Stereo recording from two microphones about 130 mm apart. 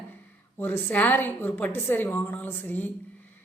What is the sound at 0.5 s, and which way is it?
A woman's voice, 15° left (ahead or behind).